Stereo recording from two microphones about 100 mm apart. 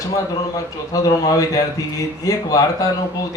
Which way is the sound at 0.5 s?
35° left (ahead or behind).